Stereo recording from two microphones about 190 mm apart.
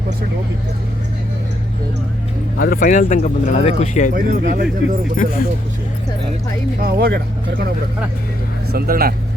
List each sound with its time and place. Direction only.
2.6 s speech: 50° left (ahead or behind)
4.1 s speech: 50° right (ahead or behind)
5.1 s speech: 45° left (ahead or behind)
6.8 s speech: 55° right (ahead or behind)
8.7 s speech: 50° right (ahead or behind)